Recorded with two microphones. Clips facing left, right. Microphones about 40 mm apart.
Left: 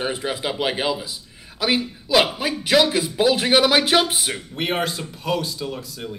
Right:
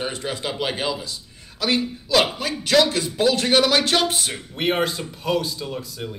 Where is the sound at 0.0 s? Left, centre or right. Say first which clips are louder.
Left 2 dB; centre.